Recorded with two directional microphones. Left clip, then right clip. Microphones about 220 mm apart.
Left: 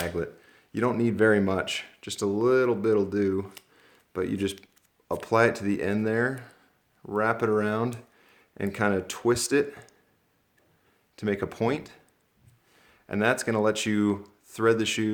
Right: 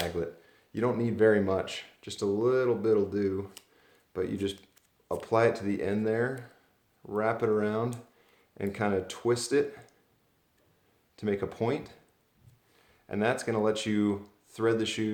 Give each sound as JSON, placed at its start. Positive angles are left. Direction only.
{"t": 0.0, "sound": "speech", "side_deg": 50}
{"t": 3.8, "sound": "a sound", "side_deg": 45}
{"t": 5.2, "sound": "speech", "side_deg": 50}
{"t": 11.2, "sound": "speech", "side_deg": 45}
{"t": 13.1, "sound": "speech", "side_deg": 50}